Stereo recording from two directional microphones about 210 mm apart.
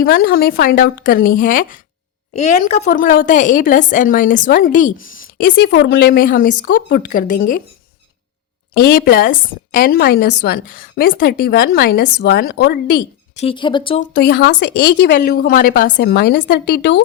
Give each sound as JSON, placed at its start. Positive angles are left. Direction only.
{"t": 0.3, "sound": "a woman's voice", "side_deg": 45}
{"t": 2.8, "sound": "a woman's voice", "side_deg": 40}
{"t": 5.5, "sound": "a woman's voice", "side_deg": 55}
{"t": 8.8, "sound": "a woman's voice", "side_deg": 45}
{"t": 13.3, "sound": "speech", "side_deg": 30}
{"t": 14.1, "sound": "a woman's voice", "side_deg": 50}